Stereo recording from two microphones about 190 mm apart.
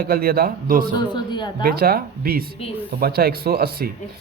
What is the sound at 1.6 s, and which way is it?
Speech, 50° right (ahead or behind).